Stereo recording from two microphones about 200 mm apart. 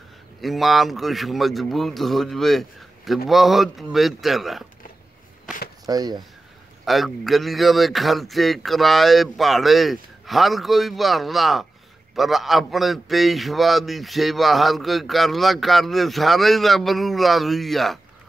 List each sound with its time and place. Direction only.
0.4 s a man's voice: centre (ahead or behind)
5.9 s speech: 20° right (ahead or behind)
6.8 s a man's voice: centre (ahead or behind)